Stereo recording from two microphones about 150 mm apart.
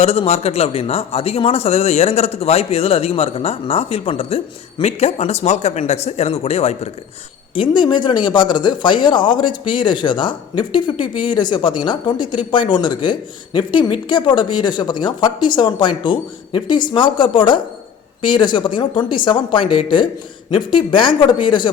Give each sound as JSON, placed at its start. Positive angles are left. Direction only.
{"t": 0.0, "sound": "speech", "side_deg": 45}
{"t": 7.5, "sound": "speech", "side_deg": 35}